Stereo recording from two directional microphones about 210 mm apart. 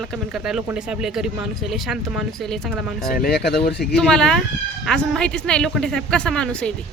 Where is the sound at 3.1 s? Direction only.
45° left (ahead or behind).